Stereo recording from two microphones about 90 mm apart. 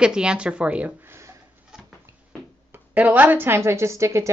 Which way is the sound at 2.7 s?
20° right (ahead or behind).